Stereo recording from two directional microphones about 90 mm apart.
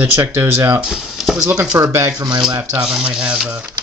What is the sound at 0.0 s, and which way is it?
Speech, 20° right (ahead or behind).